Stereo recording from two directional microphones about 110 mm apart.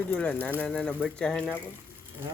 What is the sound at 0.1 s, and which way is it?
Speech, 10° left (ahead or behind).